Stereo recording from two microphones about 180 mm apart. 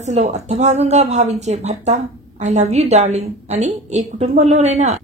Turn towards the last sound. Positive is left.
turn(degrees=-40)  # may be behind; listen again after turning